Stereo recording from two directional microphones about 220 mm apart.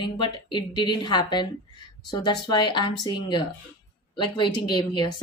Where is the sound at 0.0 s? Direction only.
20° left (ahead or behind).